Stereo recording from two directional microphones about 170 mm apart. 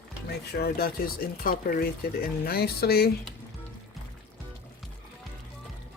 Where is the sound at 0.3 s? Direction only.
70° left (ahead or behind).